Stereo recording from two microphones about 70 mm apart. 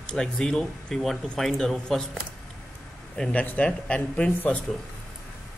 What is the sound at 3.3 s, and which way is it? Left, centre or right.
A man's voice, left.